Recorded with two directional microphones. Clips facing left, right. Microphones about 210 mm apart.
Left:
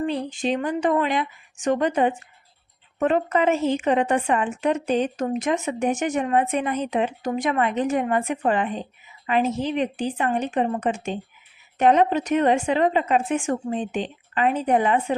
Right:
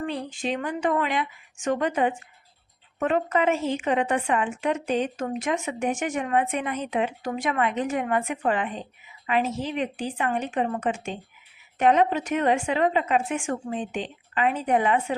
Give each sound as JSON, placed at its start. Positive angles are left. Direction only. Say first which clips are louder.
{"t": 0.4, "sound": "a woman's voice", "louder": "left 4 dB", "side_deg": 35}